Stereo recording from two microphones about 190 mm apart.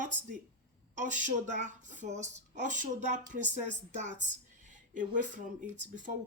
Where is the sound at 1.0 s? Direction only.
40° right (ahead or behind).